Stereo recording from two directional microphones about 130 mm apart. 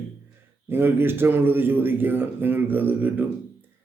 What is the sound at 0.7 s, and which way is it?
A man's voice, 15° right (ahead or behind).